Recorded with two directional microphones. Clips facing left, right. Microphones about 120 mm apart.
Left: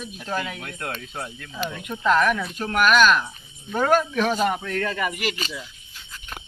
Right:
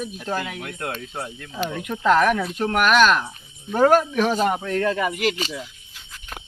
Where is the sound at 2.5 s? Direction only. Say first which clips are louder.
Left 1 dB; 25° right (ahead or behind).